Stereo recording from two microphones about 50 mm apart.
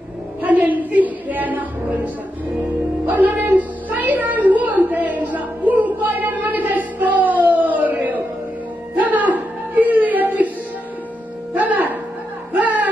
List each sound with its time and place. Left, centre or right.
0.4 s music: right
3.1 s a sound: right
8.9 s music: right
11.5 s music: right